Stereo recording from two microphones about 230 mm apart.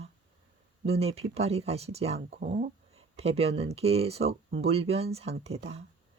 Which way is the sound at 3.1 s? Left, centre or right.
Right.